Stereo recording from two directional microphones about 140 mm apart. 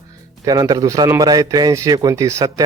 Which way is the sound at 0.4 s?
25° right (ahead or behind).